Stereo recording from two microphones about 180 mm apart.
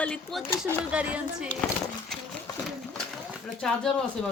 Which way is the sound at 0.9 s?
5° right (ahead or behind).